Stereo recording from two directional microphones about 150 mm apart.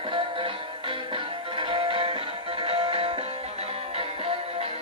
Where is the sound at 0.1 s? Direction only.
35° right (ahead or behind).